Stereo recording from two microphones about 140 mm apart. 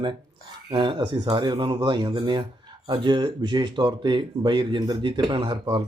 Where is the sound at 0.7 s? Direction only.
35° right (ahead or behind).